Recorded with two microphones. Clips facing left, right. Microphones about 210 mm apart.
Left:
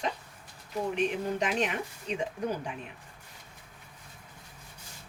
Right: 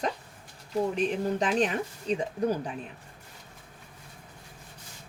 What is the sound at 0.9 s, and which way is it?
Speech, 35° right (ahead or behind).